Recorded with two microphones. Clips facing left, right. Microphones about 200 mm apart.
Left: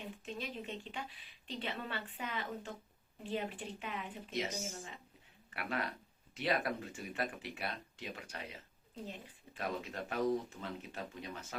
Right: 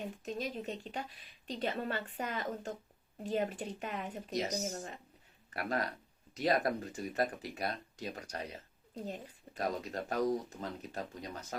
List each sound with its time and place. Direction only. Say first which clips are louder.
0.3 s a woman's voice: right 5 dB; 40° right (ahead or behind)